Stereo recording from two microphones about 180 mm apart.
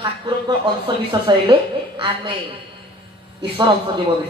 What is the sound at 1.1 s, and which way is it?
Speech, 25° right (ahead or behind).